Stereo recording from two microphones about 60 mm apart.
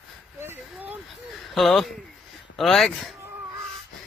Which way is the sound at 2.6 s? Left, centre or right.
Centre.